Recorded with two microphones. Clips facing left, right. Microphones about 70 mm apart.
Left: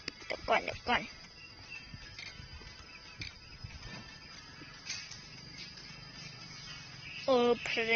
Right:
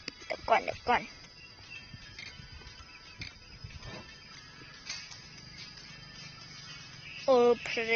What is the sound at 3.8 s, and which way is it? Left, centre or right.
Vehicle, right.